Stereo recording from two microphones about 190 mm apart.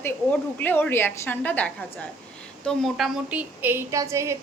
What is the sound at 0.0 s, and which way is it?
A woman's voice, 10° left (ahead or behind).